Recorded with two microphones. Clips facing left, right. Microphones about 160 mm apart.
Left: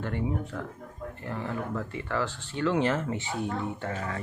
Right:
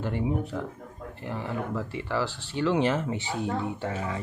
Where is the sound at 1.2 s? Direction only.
10° right (ahead or behind).